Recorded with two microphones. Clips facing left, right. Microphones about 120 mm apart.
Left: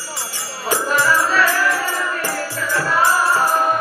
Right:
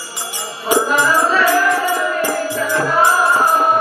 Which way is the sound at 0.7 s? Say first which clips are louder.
Right 3 dB; 15° right (ahead or behind).